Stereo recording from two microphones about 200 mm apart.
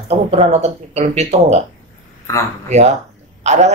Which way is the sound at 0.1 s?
30° right (ahead or behind).